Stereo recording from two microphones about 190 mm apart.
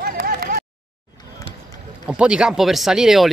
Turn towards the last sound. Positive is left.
turn(degrees=0)  # may be behind; listen again after turning